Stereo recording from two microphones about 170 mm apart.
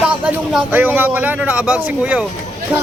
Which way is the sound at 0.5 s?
10° right (ahead or behind).